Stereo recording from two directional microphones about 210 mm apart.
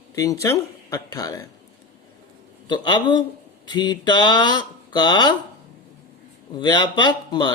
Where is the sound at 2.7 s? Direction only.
20° left (ahead or behind).